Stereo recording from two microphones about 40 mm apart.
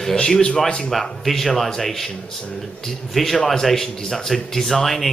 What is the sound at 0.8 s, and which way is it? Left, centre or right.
Speech, centre.